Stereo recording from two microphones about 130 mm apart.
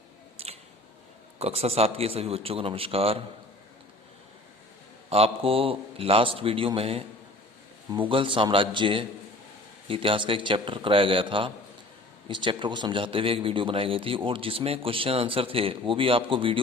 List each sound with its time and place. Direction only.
0.4 s squish: 50° right (ahead or behind)
1.4 s speech: 50° right (ahead or behind)
5.0 s a man's voice: 50° right (ahead or behind)